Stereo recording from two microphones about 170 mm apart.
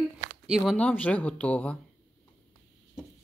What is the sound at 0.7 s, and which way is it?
Speech, 10° left (ahead or behind).